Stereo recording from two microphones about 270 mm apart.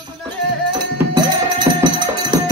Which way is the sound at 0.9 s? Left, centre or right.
Centre.